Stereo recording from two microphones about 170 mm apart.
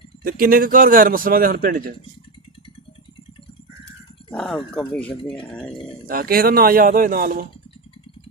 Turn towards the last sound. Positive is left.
turn(degrees=-55)  # may be behind; listen again after turning